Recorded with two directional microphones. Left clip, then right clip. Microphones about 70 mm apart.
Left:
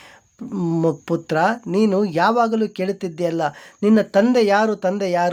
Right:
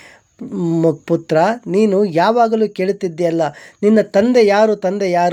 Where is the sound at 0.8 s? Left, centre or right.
Right.